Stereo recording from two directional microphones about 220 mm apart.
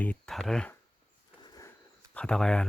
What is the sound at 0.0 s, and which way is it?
Speech, 5° left (ahead or behind).